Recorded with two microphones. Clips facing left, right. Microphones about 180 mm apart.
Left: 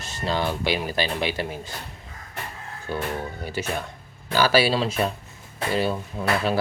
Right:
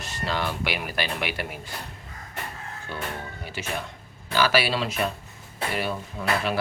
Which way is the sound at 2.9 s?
40° left (ahead or behind).